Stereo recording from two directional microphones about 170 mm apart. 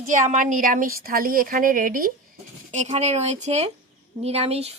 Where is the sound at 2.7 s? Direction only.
40° right (ahead or behind).